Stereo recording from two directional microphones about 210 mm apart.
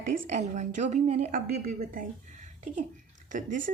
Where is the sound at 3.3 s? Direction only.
40° right (ahead or behind).